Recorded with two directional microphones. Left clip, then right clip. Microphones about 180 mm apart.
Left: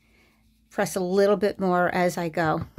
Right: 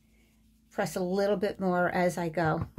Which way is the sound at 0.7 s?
45° left (ahead or behind).